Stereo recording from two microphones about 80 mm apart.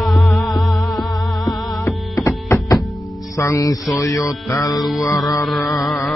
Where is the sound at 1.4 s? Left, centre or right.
Left.